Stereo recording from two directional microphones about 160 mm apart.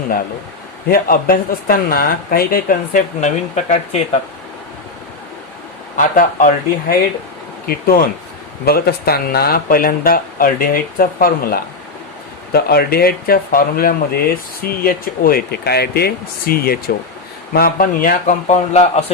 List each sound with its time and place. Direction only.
0.9 s speech: 65° left (ahead or behind); by 3.8 s 50° left (ahead or behind)
6.0 s speech: 60° left (ahead or behind)
8.6 s speech: 75° left (ahead or behind)
12.5 s speech: 75° left (ahead or behind); by 19.1 s 40° left (ahead or behind)